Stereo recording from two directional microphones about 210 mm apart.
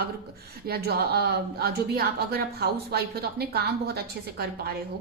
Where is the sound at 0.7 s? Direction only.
45° right (ahead or behind).